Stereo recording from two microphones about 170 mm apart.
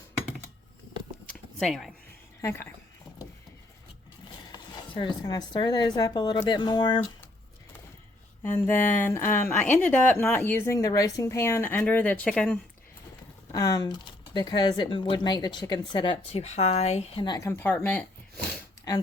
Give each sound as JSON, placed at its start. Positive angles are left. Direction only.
{"t": 1.5, "sound": "speech", "side_deg": 0}
{"t": 2.4, "sound": "a woman's voice", "side_deg": 15}
{"t": 4.5, "sound": "speech", "side_deg": 25}
{"t": 8.4, "sound": "a woman's voice", "side_deg": 15}
{"t": 13.5, "sound": "a woman's voice", "side_deg": 20}
{"t": 17.2, "sound": "a woman's voice", "side_deg": 20}
{"t": 17.7, "sound": "a sound", "side_deg": 5}
{"t": 18.9, "sound": "speech", "side_deg": 20}